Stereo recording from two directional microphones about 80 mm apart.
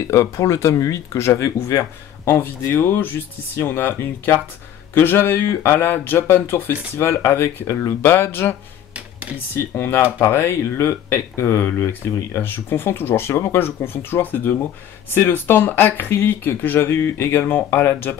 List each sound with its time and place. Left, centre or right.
0.1 s speech: left
8.9 s a sound: centre
9.8 s speech: left